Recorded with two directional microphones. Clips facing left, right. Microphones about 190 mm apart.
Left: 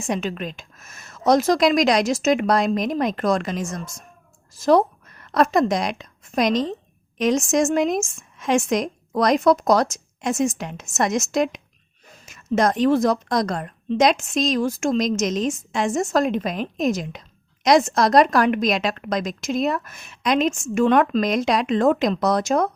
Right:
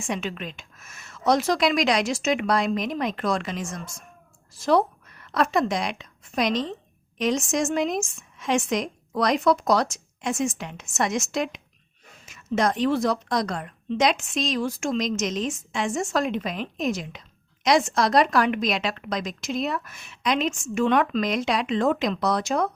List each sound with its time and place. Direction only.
0.0 s a woman's voice: 40° left (ahead or behind)